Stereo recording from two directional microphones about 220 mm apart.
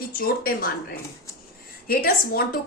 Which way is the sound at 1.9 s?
40° left (ahead or behind).